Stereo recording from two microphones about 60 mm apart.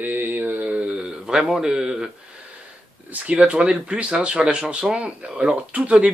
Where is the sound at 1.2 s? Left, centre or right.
Centre.